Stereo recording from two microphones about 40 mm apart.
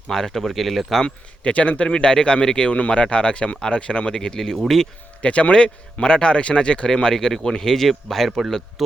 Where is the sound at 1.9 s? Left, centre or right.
Left.